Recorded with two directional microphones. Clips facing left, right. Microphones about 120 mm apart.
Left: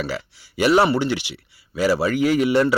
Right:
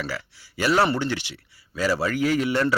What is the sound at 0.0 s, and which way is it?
Speech, 15° left (ahead or behind).